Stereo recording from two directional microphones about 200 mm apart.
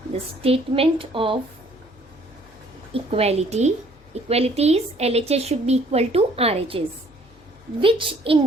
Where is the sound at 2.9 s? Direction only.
30° right (ahead or behind).